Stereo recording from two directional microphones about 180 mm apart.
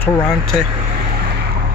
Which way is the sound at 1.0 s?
60° right (ahead or behind).